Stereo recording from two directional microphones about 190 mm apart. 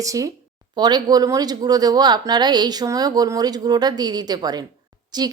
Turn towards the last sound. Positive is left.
turn(degrees=-20)  # may be behind; listen again after turning